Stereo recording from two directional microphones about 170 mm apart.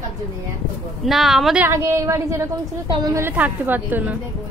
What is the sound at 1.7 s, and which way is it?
A woman's voice, 15° right (ahead or behind).